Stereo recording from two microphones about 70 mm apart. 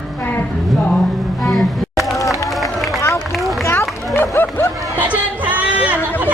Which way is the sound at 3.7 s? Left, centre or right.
Left.